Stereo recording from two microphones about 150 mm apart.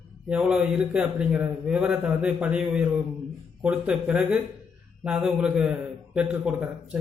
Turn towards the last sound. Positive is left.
turn(degrees=-5)  # may be behind; listen again after turning